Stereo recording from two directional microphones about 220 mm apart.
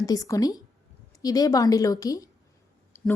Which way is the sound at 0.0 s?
15° left (ahead or behind).